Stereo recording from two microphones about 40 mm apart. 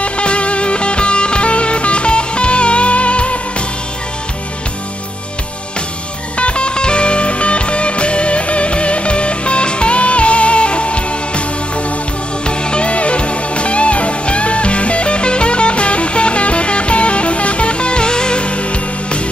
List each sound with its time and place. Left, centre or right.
0.0 s music: left
6.3 s music: left